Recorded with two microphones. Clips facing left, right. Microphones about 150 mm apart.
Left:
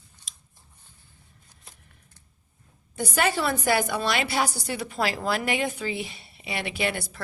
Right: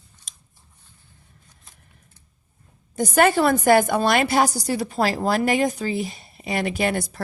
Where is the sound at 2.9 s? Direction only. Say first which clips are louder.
Right 8 dB; 45° right (ahead or behind).